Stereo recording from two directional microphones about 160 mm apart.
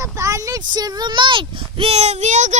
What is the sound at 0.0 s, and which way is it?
A child's voice, 20° right (ahead or behind).